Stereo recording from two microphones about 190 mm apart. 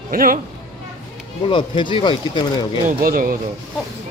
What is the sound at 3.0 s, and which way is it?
Speech, 50° right (ahead or behind).